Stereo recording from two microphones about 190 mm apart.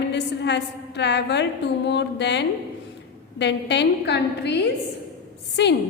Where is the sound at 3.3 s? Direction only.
65° left (ahead or behind).